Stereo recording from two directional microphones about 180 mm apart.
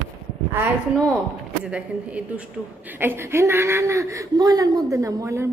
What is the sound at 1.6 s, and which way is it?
A woman's voice, 5° right (ahead or behind).